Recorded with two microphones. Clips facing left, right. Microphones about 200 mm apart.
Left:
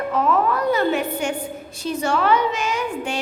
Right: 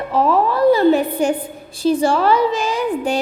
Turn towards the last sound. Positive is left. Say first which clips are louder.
# right 5 dB
turn(degrees=-35)  # may be behind; listen again after turning